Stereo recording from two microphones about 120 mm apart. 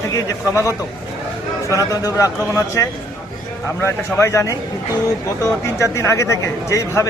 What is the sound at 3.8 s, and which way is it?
Speech, 25° left (ahead or behind).